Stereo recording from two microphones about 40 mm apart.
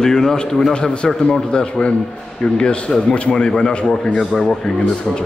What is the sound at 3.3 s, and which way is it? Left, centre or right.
Speech, centre.